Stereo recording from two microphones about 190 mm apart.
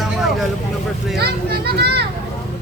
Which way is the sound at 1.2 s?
55° right (ahead or behind).